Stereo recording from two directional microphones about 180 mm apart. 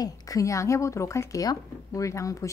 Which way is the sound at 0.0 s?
20° left (ahead or behind).